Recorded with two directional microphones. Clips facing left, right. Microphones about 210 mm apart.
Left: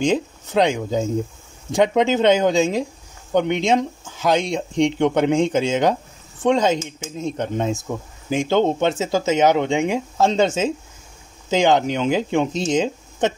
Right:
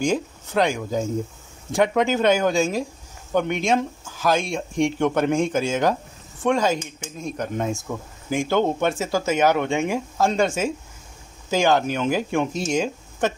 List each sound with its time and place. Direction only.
0.0 s speech: 20° left (ahead or behind)